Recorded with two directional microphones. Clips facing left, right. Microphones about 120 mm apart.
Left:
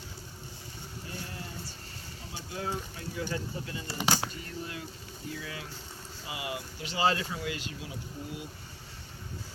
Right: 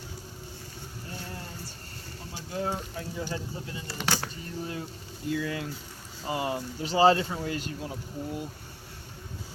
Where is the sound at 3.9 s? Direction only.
20° left (ahead or behind).